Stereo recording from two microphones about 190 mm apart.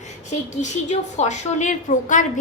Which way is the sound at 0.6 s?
35° left (ahead or behind).